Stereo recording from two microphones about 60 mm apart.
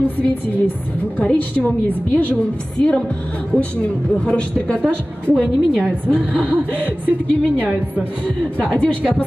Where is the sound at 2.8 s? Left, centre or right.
Centre.